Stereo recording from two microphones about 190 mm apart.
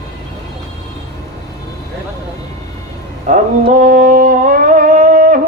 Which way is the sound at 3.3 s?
40° right (ahead or behind).